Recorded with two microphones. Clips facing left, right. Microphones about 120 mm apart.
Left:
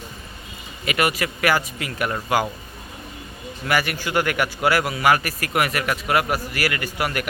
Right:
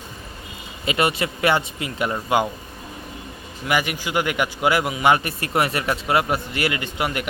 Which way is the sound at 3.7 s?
15° right (ahead or behind).